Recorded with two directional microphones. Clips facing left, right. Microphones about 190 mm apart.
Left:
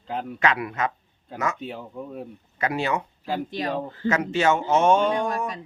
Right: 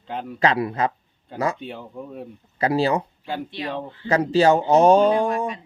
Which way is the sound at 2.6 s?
35° right (ahead or behind).